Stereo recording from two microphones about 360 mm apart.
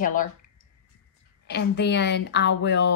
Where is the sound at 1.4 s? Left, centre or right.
Left.